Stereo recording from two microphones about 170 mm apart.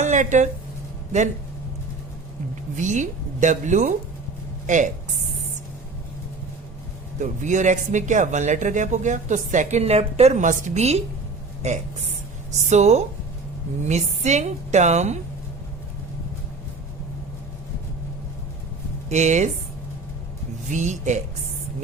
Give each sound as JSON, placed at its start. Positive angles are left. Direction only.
{"t": 0.0, "sound": "speech", "side_deg": -45}
{"t": 2.7, "sound": "speech", "side_deg": -45}
{"t": 7.2, "sound": "speech", "side_deg": -45}
{"t": 19.0, "sound": "speech", "side_deg": -45}
{"t": 20.7, "sound": "speech", "side_deg": -45}